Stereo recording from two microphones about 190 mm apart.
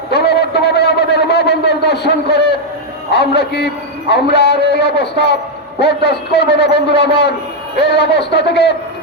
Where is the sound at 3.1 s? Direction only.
60° left (ahead or behind).